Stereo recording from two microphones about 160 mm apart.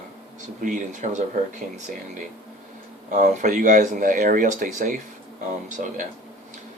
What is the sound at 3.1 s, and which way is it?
Speech, 50° right (ahead or behind).